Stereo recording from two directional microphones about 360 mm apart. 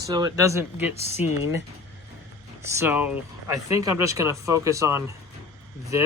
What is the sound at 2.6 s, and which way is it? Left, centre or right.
Speech, centre.